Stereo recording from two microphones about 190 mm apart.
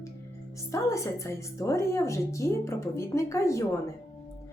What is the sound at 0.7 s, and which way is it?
Speech, 15° left (ahead or behind).